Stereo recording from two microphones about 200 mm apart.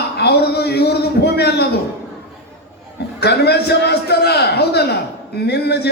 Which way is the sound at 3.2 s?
55° left (ahead or behind).